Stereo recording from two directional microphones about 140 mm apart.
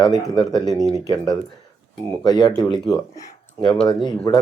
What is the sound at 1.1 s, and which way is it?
Speech, 30° left (ahead or behind).